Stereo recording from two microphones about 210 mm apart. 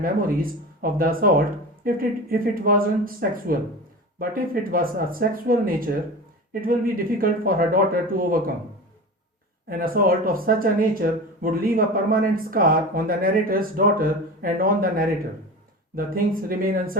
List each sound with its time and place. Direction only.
0.0 s speech: 45° right (ahead or behind)
9.6 s speech: 45° right (ahead or behind)